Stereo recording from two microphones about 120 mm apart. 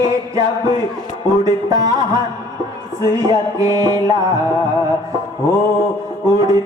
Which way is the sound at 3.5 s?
25° right (ahead or behind).